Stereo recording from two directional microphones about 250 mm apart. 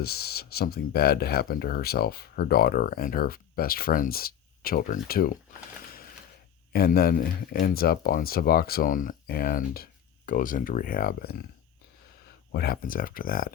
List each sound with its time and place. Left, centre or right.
0.0 s speech: left
6.7 s speech: left
12.5 s speech: left